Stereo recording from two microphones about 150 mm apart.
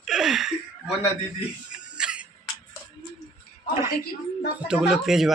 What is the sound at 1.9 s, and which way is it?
Music, 5° right (ahead or behind).